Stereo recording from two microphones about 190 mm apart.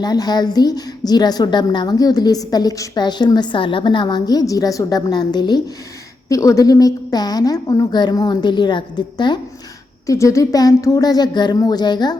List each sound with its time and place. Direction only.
0.0 s a woman's voice: 20° left (ahead or behind)